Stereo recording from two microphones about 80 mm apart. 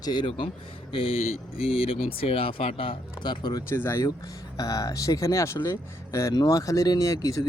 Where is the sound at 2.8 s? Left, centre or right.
Left.